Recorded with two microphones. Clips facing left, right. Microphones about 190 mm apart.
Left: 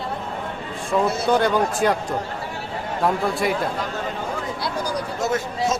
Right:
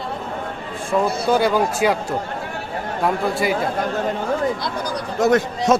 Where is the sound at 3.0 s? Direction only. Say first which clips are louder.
Right 1 dB; centre (ahead or behind).